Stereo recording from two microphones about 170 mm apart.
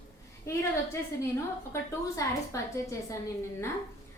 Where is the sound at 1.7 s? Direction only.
15° left (ahead or behind).